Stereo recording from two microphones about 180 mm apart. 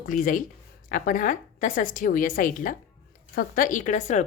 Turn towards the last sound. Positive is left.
turn(degrees=40)  # may be behind; listen again after turning